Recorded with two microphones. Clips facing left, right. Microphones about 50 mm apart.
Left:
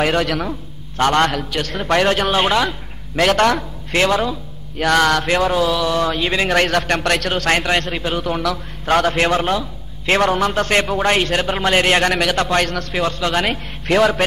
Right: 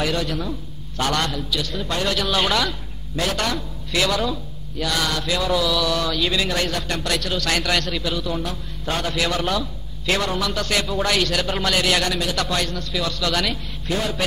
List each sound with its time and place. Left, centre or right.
0.0 s mantra: left
0.5 s a man's voice: left
2.0 s a man's voice: left
3.3 s a man's voice: left
4.7 s mantra: left
5.8 s a man's voice: left
8.8 s mantra: left
10.0 s a man's voice: left
12.4 s mantra: left
13.0 s a man's voice: left
13.5 s a man's voice: left